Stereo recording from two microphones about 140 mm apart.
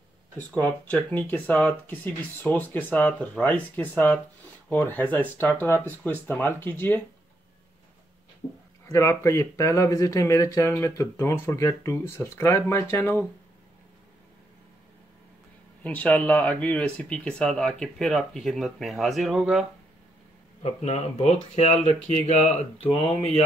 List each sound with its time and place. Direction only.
0.4 s speech: 10° left (ahead or behind)
8.4 s speech: 50° left (ahead or behind)
8.9 s speech: 20° left (ahead or behind)
15.8 s speech: 10° left (ahead or behind)
20.6 s speech: 50° left (ahead or behind)